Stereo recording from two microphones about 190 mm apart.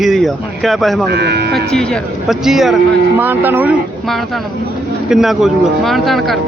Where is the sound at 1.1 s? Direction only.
60° right (ahead or behind).